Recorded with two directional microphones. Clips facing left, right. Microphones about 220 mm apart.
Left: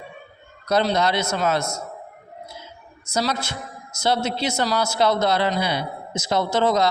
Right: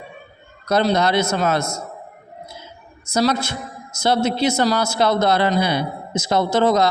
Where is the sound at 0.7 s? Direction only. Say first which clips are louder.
Right 3 dB; 50° right (ahead or behind).